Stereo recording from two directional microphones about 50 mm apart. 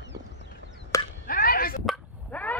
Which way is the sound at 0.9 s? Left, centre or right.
Left.